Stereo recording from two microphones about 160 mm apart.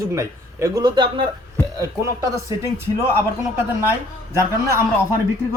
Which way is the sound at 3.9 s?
15° right (ahead or behind).